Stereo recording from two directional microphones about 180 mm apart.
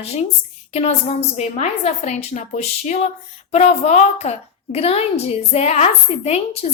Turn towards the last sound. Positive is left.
turn(degrees=35)  # may be behind; listen again after turning